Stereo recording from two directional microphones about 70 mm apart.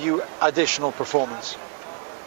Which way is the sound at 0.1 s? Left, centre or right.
Right.